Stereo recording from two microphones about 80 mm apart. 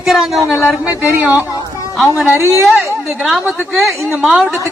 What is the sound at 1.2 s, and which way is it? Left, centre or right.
Speech, right.